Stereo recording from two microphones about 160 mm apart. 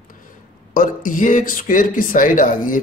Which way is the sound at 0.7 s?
55° left (ahead or behind).